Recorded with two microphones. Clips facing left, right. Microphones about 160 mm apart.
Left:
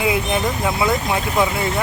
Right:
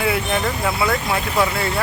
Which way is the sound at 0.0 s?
15° left (ahead or behind).